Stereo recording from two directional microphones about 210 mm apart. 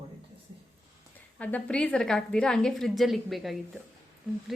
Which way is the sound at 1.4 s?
5° left (ahead or behind).